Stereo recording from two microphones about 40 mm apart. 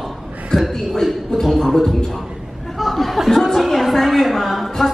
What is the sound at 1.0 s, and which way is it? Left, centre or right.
Speech, centre.